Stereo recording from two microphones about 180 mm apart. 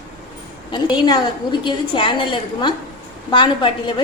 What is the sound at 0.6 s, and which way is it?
A woman's voice, 25° left (ahead or behind).